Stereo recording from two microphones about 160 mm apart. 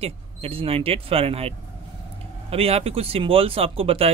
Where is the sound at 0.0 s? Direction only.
35° right (ahead or behind).